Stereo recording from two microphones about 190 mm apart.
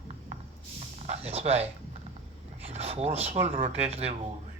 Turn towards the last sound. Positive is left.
turn(degrees=-30)  # may be behind; listen again after turning